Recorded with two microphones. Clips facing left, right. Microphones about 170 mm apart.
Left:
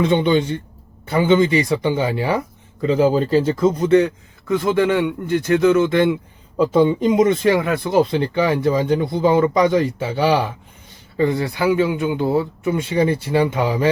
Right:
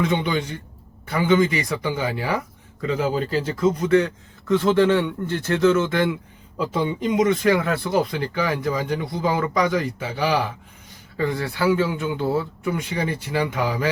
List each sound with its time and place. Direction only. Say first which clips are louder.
0.0 s speech: left 6 dB; 30° left (ahead or behind)
4.4 s speech: even; 10° left (ahead or behind)
6.6 s speech: left 9 dB; 35° left (ahead or behind)
7.5 s speech: left 4 dB; 20° left (ahead or behind)